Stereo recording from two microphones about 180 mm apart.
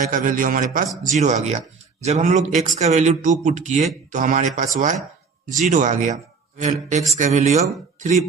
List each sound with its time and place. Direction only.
0.1 s a man's voice: 50° right (ahead or behind)